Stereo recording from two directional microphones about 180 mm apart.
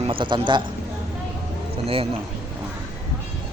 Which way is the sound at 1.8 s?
30° right (ahead or behind).